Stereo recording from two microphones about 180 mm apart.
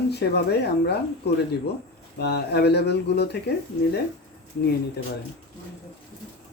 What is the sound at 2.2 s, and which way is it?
Speech, 65° left (ahead or behind).